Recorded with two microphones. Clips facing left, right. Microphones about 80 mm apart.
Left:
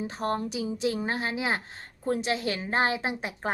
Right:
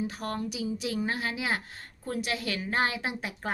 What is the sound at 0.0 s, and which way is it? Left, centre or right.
A woman's voice, left.